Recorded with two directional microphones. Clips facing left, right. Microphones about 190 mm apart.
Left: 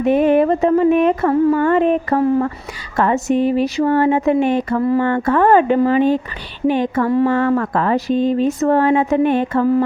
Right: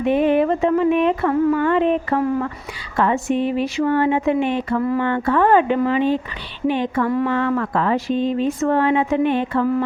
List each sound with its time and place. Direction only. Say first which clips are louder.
0.0 s speech: left 3 dB; 45° left (ahead or behind)
7.1 s speech: left 8 dB; 30° left (ahead or behind)
7.3 s speech: left 3 dB; 45° left (ahead or behind)